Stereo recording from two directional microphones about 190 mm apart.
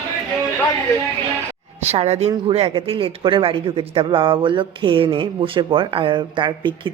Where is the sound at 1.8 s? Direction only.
35° right (ahead or behind).